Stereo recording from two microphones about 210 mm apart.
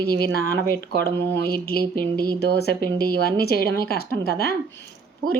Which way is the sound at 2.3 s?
50° left (ahead or behind).